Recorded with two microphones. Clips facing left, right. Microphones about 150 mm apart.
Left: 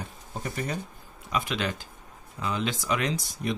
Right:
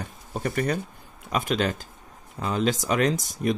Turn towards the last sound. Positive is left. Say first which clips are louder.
# right 5 dB
turn(degrees=-45)  # may be behind; listen again after turning